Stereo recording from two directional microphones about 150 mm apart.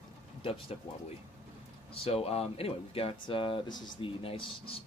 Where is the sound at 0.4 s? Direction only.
40° left (ahead or behind).